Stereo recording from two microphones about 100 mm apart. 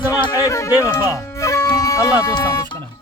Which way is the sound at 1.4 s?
30° left (ahead or behind).